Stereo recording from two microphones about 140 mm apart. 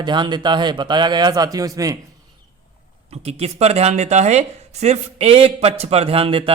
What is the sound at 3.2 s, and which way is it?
Speech, 45° right (ahead or behind).